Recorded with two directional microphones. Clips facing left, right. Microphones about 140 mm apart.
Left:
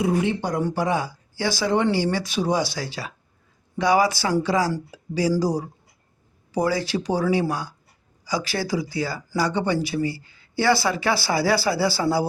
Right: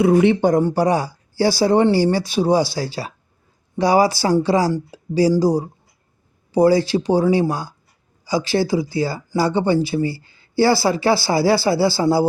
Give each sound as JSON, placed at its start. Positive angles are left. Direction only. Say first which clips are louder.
{"t": 0.0, "sound": "speech", "louder": "right 8 dB", "side_deg": -65}
{"t": 0.6, "sound": "speech", "louder": "right 6 dB", "side_deg": -40}